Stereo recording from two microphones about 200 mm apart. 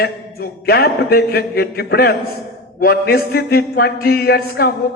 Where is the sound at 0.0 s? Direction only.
50° left (ahead or behind).